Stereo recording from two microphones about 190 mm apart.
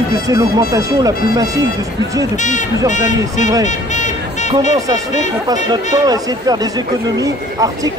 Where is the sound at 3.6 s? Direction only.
40° left (ahead or behind).